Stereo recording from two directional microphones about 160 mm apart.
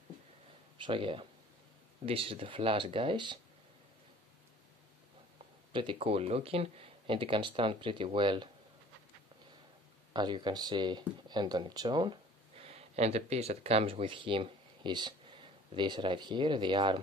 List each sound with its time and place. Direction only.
0.7 s speech: 30° right (ahead or behind)
5.7 s speech: 30° right (ahead or behind)
10.1 s speech: 30° right (ahead or behind)